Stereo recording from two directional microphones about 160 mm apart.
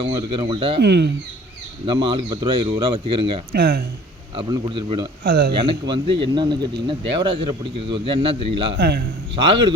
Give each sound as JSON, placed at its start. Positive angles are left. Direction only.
{"t": 0.0, "sound": "a man's voice", "side_deg": -30}
{"t": 0.8, "sound": "a man's voice", "side_deg": -90}
{"t": 1.9, "sound": "a man's voice", "side_deg": -30}
{"t": 3.5, "sound": "a man's voice", "side_deg": -90}
{"t": 4.4, "sound": "a man's voice", "side_deg": -25}
{"t": 5.2, "sound": "speech", "side_deg": -85}
{"t": 5.8, "sound": "a man's voice", "side_deg": -30}
{"t": 8.7, "sound": "a man's voice", "side_deg": -90}